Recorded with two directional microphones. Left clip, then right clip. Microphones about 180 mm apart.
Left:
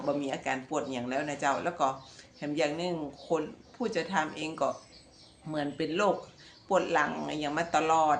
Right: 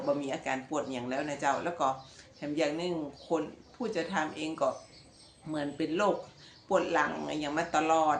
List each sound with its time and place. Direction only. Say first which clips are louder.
0.0 s speech: even; 30° left (ahead or behind)